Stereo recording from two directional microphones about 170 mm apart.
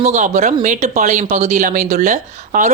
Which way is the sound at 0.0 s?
45° right (ahead or behind).